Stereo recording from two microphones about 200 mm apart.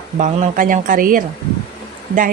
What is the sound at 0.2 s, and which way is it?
Speech, 40° right (ahead or behind).